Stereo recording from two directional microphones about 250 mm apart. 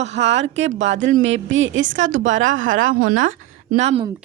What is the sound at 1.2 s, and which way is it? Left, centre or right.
A woman's voice, right.